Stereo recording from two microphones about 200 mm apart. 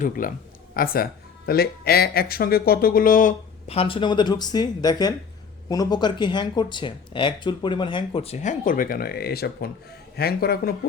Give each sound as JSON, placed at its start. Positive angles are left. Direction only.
{"t": 0.0, "sound": "speech", "side_deg": 45}
{"t": 3.7, "sound": "speech", "side_deg": 30}